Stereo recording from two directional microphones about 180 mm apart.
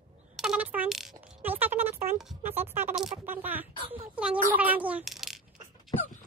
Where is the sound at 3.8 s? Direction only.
30° right (ahead or behind).